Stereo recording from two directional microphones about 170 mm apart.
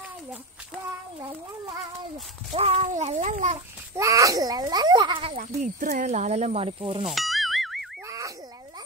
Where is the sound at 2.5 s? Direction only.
35° right (ahead or behind).